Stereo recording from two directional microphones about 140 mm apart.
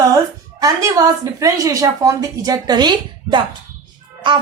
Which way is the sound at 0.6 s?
25° right (ahead or behind).